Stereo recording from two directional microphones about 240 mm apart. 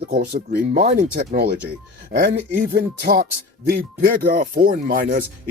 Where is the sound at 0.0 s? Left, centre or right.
Right.